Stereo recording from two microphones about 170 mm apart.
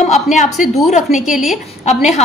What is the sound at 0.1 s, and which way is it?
A woman's voice, 45° left (ahead or behind).